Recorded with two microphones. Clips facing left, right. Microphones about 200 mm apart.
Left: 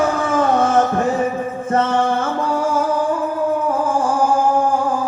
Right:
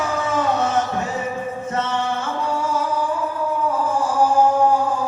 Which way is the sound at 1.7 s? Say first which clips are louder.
Left 8 dB; 55° left (ahead or behind).